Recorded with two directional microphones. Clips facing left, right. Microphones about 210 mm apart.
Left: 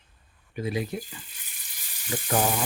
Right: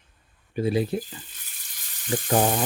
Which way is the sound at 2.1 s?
35° right (ahead or behind).